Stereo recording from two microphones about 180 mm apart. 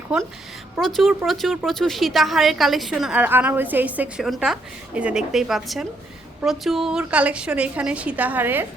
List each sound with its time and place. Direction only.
0.1 s a woman's voice: 5° right (ahead or behind)